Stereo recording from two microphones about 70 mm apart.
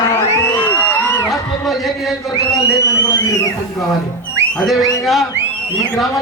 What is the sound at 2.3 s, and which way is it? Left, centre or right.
Speech, left.